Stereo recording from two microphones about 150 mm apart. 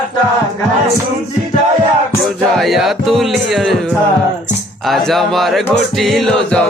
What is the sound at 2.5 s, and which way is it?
Speech, centre (ahead or behind).